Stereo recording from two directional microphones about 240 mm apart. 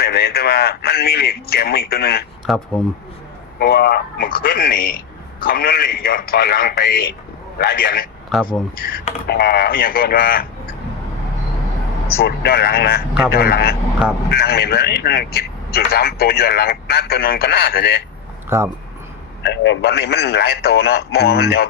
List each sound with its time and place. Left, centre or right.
0.0 s a man's voice: left
2.7 s speech: centre
3.6 s a man's voice: left
8.3 s speech: centre
8.8 s a man's voice: left
12.0 s a man's voice: left
18.4 s speech: centre
19.4 s a man's voice: left